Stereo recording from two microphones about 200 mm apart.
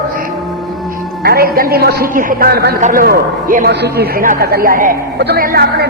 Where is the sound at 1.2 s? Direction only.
50° right (ahead or behind).